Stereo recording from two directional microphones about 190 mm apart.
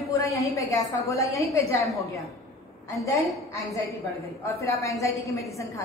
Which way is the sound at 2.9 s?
15° left (ahead or behind).